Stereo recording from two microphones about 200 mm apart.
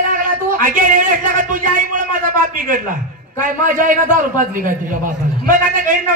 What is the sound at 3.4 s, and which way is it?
A man's voice, 40° right (ahead or behind).